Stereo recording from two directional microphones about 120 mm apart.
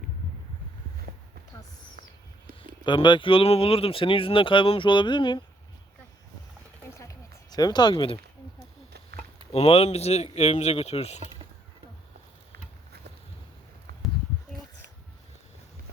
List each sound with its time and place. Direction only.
2.6 s speech: 40° left (ahead or behind)
6.9 s a sound: 25° left (ahead or behind); by 8.2 s 45° left (ahead or behind)
9.5 s speech: 60° left (ahead or behind)